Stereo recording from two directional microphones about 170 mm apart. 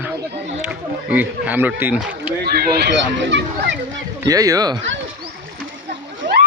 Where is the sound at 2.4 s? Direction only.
70° right (ahead or behind).